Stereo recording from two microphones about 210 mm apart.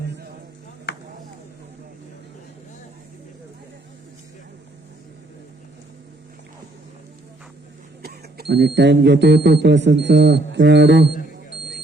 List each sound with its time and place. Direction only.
8.0 s speech: 50° right (ahead or behind)